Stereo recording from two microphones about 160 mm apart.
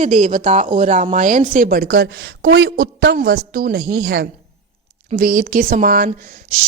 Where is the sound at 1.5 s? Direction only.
60° right (ahead or behind).